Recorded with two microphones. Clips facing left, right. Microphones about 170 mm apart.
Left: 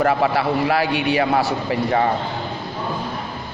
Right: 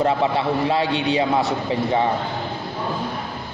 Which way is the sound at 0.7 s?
20° right (ahead or behind).